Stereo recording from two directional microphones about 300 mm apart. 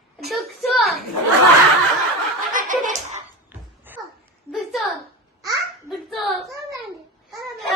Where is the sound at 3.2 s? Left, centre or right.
Centre.